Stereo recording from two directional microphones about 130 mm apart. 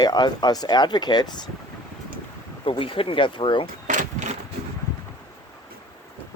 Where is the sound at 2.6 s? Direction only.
45° left (ahead or behind).